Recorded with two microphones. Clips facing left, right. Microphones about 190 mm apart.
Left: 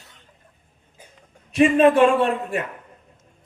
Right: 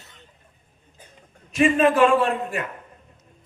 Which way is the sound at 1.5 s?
35° left (ahead or behind).